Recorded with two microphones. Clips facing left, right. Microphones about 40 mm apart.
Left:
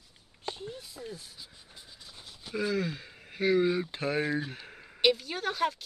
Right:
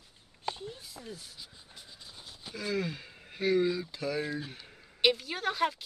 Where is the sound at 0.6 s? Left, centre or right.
Left.